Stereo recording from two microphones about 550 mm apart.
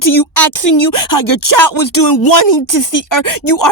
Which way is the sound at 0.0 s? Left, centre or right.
Left.